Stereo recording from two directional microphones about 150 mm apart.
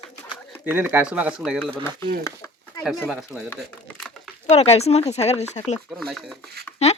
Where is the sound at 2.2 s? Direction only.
15° left (ahead or behind).